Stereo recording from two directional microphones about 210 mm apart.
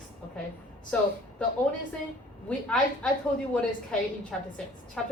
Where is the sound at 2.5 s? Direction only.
5° left (ahead or behind).